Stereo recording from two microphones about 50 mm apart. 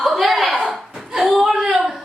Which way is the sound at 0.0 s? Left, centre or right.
Centre.